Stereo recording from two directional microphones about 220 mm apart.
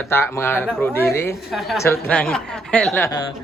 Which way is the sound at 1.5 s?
Centre (ahead or behind).